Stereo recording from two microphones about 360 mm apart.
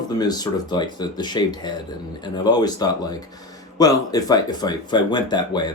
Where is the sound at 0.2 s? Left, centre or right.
Centre.